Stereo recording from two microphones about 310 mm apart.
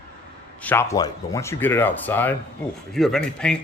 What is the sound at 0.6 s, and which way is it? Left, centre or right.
Speech, centre.